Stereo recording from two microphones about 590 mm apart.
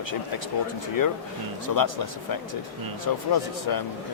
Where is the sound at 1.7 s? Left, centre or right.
Left.